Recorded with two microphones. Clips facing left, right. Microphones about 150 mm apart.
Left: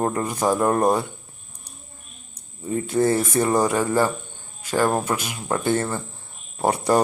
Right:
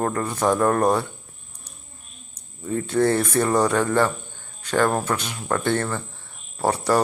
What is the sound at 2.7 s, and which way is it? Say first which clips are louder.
Speech: even; 10° left (ahead or behind).